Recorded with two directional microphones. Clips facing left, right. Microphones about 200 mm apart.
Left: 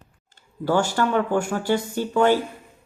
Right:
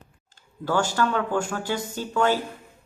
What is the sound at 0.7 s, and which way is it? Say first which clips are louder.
Speech: left 3 dB; 15° left (ahead or behind).